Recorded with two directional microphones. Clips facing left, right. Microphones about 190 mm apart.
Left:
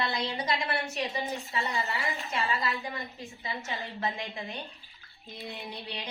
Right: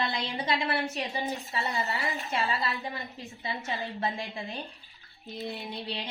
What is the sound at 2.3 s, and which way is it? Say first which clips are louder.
A woman's voice: even; 30° right (ahead or behind).